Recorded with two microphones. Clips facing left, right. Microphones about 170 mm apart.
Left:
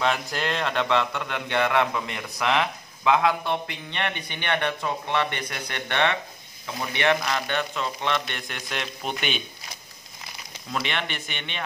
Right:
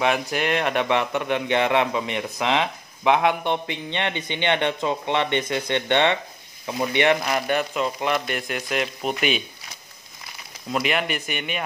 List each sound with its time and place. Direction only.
0.0 s a man's voice: 15° right (ahead or behind)
10.7 s speech: 5° right (ahead or behind)